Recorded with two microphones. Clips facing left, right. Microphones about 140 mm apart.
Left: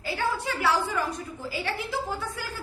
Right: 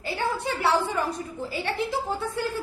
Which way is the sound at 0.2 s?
30° right (ahead or behind).